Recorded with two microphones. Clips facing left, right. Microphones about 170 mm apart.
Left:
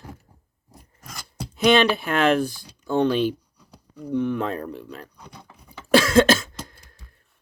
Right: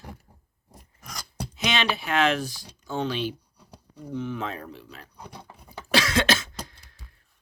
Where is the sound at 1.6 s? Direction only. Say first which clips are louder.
Left 9 dB; 50° left (ahead or behind).